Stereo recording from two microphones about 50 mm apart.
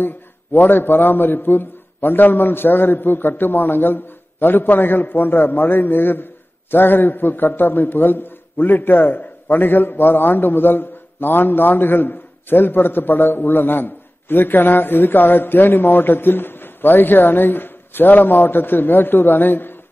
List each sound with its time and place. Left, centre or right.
0.0 s a man's voice: left